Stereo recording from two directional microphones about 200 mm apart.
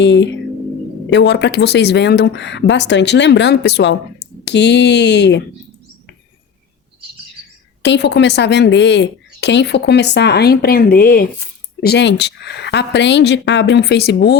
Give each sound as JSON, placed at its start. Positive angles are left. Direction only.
{"t": 0.0, "sound": "speech", "side_deg": 60}
{"t": 7.8, "sound": "speech", "side_deg": 60}